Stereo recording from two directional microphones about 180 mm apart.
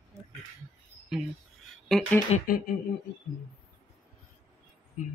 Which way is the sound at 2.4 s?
55° left (ahead or behind).